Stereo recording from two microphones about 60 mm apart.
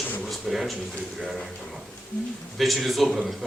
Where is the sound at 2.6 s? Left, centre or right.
Centre.